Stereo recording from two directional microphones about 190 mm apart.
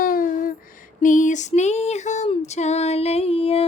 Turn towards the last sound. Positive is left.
turn(degrees=30)  # may be behind; listen again after turning